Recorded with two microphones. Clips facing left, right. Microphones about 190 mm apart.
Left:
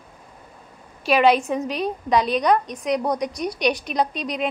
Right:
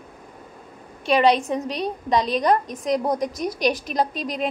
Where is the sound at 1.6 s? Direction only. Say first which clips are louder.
Left 1 dB; 5° left (ahead or behind).